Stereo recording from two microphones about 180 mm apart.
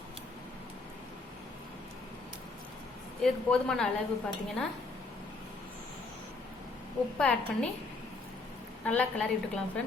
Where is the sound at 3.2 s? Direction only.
5° left (ahead or behind).